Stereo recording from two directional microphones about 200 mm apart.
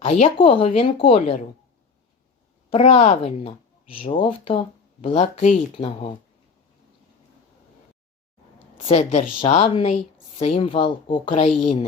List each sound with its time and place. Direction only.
0.0 s speech: 30° left (ahead or behind)
2.6 s speech: 30° left (ahead or behind)
8.5 s speech: 30° left (ahead or behind)